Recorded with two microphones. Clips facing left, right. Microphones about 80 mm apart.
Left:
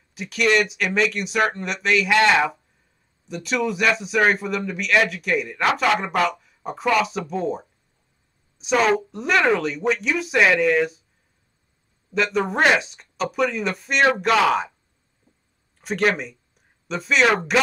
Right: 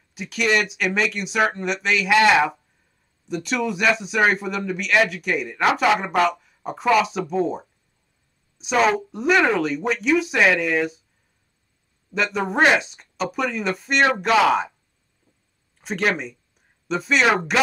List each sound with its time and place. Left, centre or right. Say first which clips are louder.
0.1 s speech: left 1 dB; centre
12.1 s speech: left 2 dB; centre
15.8 s speech: left 2 dB; centre